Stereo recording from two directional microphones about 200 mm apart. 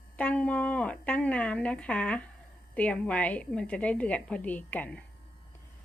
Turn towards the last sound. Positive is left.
turn(degrees=5)  # may be behind; listen again after turning